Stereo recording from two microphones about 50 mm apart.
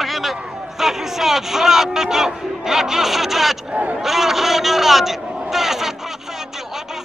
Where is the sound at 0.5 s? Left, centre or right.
Centre.